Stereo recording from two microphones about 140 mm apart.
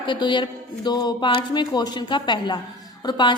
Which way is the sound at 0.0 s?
35° left (ahead or behind).